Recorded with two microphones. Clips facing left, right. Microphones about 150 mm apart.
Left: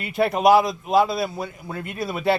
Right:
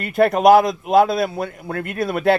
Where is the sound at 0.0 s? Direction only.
50° right (ahead or behind).